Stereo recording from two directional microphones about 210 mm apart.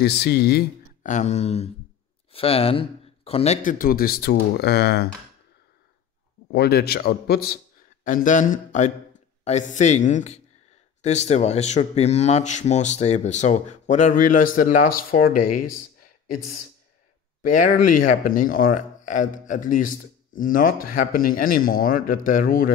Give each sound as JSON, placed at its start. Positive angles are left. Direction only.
{"t": 0.0, "sound": "speech", "side_deg": 50}
{"t": 6.5, "sound": "speech", "side_deg": 50}
{"t": 17.4, "sound": "speech", "side_deg": 40}